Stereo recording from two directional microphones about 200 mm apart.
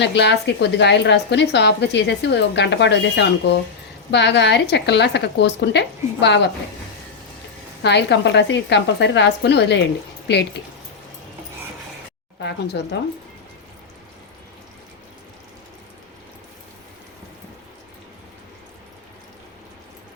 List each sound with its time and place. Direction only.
0.0 s a woman's voice: 60° left (ahead or behind)
7.8 s a woman's voice: 60° left (ahead or behind)
12.4 s a woman's voice: 60° left (ahead or behind)